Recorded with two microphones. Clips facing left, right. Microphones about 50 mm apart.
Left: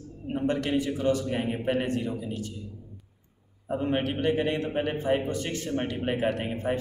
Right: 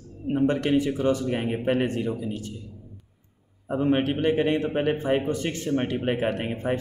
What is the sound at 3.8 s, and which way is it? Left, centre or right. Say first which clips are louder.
A man's voice: right 4 dB; right.